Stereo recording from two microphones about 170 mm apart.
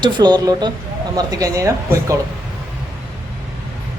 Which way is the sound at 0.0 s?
25° right (ahead or behind).